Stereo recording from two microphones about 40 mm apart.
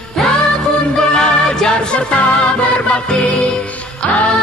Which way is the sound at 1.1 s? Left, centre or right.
Left.